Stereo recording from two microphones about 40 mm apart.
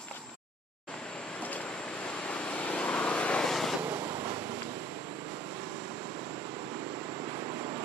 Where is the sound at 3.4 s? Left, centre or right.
Centre.